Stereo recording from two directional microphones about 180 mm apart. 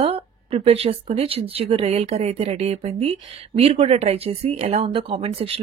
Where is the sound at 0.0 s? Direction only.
35° right (ahead or behind).